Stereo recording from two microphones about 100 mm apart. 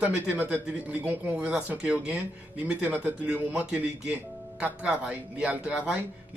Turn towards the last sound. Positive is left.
turn(degrees=-10)  # may be behind; listen again after turning